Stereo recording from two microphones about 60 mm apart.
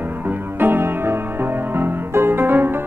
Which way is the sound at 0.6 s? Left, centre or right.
Right.